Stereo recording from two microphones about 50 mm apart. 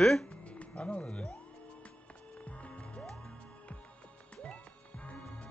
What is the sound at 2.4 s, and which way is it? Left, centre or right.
Music, left.